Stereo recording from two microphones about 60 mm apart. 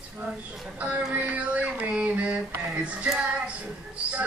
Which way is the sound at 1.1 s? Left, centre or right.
Right.